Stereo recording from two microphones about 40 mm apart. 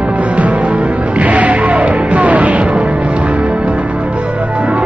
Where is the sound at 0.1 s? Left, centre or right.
Right.